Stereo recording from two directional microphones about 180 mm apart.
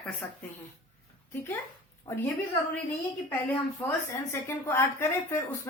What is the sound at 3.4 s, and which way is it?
A woman's voice, 10° left (ahead or behind).